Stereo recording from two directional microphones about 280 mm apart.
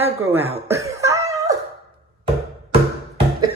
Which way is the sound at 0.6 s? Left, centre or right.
Centre.